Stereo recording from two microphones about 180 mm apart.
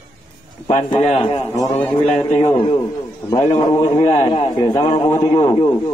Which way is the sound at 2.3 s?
30° left (ahead or behind).